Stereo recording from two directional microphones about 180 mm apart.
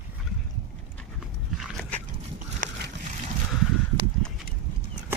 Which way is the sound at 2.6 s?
50° right (ahead or behind).